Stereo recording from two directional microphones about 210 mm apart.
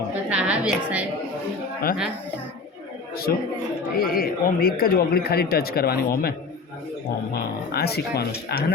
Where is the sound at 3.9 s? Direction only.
45° left (ahead or behind).